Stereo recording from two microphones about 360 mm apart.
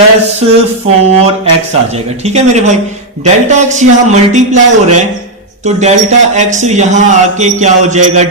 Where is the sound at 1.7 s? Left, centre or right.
Centre.